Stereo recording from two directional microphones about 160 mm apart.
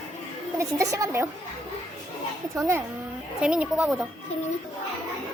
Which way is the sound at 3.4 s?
5° right (ahead or behind).